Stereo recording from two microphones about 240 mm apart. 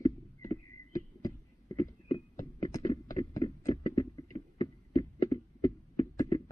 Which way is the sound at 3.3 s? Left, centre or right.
Centre.